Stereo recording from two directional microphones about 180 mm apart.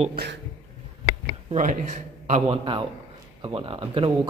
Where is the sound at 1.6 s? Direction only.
45° right (ahead or behind).